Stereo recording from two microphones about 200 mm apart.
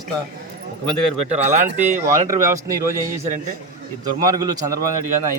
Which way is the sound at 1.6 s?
40° right (ahead or behind).